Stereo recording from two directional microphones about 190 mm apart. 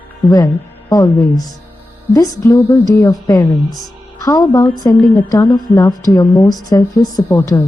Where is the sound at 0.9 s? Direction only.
20° left (ahead or behind).